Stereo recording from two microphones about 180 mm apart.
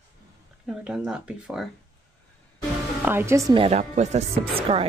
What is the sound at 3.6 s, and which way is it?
Speech, 35° right (ahead or behind).